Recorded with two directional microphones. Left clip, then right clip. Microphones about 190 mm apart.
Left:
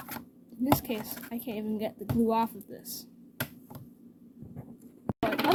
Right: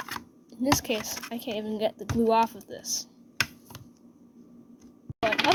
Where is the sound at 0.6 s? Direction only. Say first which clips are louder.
Right 3 dB; 25° right (ahead or behind).